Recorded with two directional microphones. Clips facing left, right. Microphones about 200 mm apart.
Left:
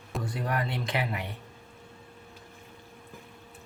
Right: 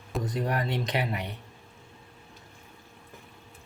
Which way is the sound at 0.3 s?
20° right (ahead or behind).